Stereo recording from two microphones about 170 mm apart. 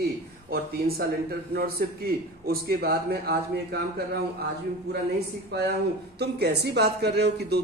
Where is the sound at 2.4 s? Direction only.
65° right (ahead or behind).